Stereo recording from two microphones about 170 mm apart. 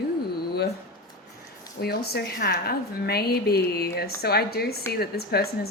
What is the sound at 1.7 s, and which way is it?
A woman's voice, 70° left (ahead or behind).